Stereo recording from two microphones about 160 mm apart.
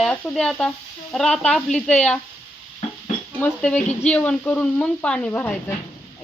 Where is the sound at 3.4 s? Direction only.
10° left (ahead or behind).